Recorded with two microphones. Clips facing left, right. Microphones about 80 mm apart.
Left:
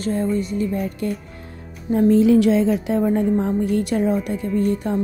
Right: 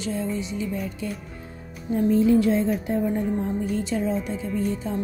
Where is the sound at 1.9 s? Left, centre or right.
Left.